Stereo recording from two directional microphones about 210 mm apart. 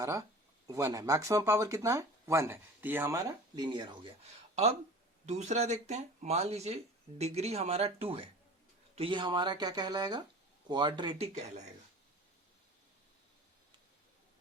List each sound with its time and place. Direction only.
0.0 s speech: 15° right (ahead or behind)